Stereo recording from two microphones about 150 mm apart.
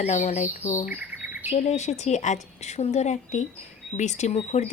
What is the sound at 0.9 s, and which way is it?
Chirp, 15° right (ahead or behind).